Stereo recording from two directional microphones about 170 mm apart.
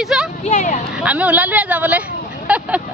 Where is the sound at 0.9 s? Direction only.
5° right (ahead or behind).